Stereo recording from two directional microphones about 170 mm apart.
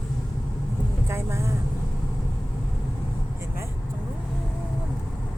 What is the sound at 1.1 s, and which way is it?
Speech, 15° right (ahead or behind).